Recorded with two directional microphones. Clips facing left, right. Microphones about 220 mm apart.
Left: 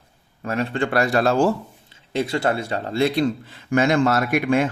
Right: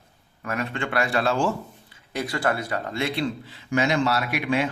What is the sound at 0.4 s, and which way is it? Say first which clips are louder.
Speech: left 5 dB; 30° left (ahead or behind).